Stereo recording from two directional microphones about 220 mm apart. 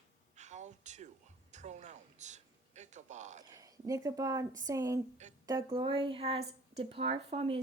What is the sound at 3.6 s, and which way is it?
Speech, 15° right (ahead or behind).